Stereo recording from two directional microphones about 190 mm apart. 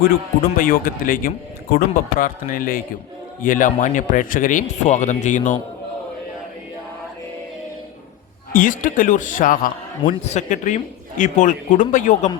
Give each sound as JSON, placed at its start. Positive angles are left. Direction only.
{"t": 0.0, "sound": "speech", "side_deg": 50}
{"t": 8.5, "sound": "a man's voice", "side_deg": 45}